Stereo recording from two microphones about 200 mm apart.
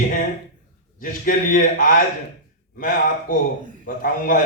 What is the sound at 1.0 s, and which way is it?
A man's voice, 45° left (ahead or behind).